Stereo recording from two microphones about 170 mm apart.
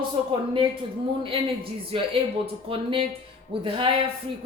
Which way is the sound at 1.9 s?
30° right (ahead or behind).